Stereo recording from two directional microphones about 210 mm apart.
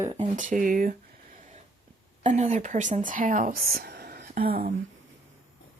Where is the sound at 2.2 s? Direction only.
35° right (ahead or behind).